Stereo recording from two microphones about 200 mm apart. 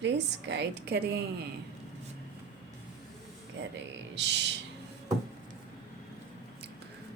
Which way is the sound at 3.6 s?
65° right (ahead or behind).